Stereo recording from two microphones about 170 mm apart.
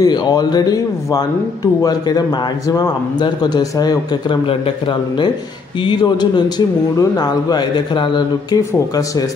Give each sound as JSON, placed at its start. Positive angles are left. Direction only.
{"t": 0.0, "sound": "speech", "side_deg": 25}